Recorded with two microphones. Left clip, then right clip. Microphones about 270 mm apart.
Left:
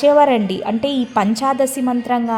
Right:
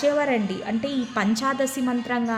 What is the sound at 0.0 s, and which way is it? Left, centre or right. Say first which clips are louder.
A woman's voice: left 10 dB; left.